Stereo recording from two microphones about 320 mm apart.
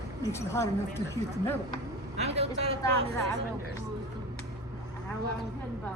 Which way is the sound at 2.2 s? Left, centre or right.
Centre.